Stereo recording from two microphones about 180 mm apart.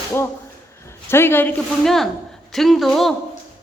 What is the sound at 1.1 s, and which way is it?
Speech, 10° left (ahead or behind).